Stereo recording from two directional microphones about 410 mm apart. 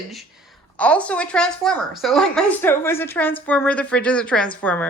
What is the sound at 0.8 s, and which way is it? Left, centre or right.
A woman's voice, centre.